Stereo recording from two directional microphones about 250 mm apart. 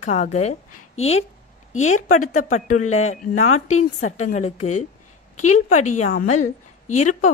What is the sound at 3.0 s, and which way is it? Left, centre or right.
A woman's voice, left.